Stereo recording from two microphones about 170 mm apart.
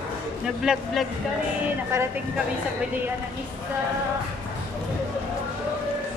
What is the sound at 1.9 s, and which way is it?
Speech, 15° right (ahead or behind).